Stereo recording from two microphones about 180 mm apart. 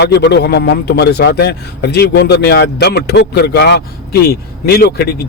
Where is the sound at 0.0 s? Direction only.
70° left (ahead or behind).